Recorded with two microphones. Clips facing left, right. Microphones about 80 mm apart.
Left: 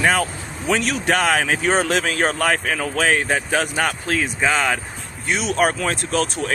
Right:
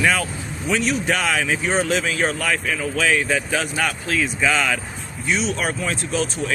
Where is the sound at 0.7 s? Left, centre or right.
Left.